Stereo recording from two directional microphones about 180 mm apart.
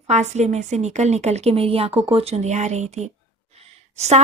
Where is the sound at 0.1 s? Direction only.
40° right (ahead or behind).